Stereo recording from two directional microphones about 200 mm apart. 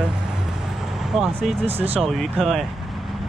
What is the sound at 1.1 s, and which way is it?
Speech, centre (ahead or behind).